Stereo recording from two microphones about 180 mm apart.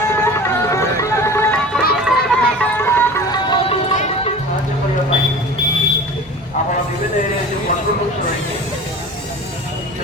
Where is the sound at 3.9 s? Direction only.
45° left (ahead or behind).